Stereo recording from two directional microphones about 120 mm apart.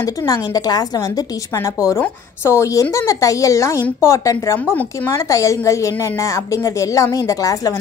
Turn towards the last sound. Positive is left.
turn(degrees=30)  # may be behind; listen again after turning